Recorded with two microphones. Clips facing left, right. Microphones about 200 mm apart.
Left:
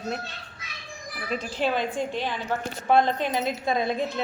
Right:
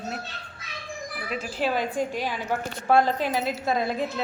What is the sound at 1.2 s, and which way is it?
A woman's voice, 5° right (ahead or behind).